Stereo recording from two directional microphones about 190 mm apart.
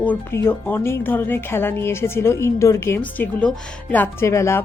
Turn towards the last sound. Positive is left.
turn(degrees=15)  # may be behind; listen again after turning